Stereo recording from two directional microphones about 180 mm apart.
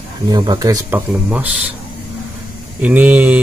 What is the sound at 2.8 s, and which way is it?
Speech, 10° right (ahead or behind).